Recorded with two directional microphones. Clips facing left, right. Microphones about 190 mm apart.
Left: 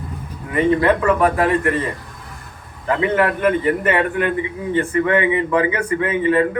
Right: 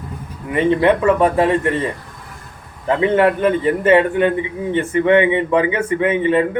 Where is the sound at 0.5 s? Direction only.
25° right (ahead or behind).